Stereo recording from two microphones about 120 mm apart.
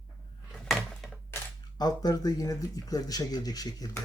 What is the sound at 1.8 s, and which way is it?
Speech, 35° left (ahead or behind).